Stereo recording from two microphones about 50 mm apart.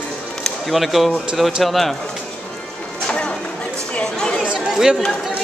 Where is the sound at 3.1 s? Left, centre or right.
Centre.